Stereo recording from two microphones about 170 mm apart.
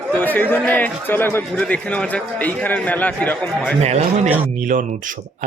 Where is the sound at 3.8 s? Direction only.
40° right (ahead or behind).